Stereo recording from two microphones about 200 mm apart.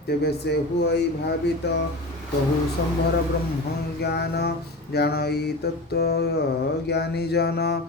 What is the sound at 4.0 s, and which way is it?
Mantra, 55° left (ahead or behind).